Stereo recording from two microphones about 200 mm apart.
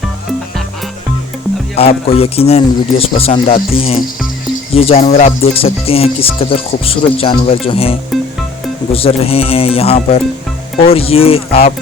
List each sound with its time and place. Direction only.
1.7 s speech: 30° left (ahead or behind)